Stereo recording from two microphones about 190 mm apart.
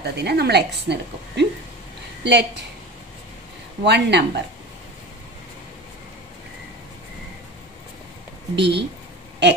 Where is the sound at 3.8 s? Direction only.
65° right (ahead or behind).